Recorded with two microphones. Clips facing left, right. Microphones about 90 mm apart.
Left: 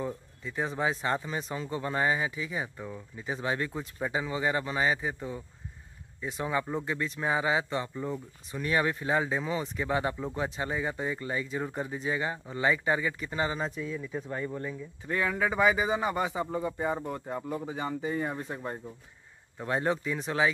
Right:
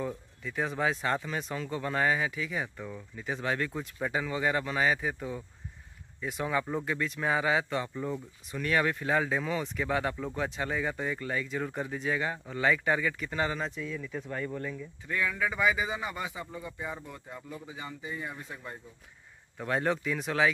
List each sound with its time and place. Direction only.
0.6 s speech: 5° left (ahead or behind)
13.7 s speech: 20° left (ahead or behind)
15.0 s a man's voice: 30° left (ahead or behind)
19.6 s speech: 10° left (ahead or behind)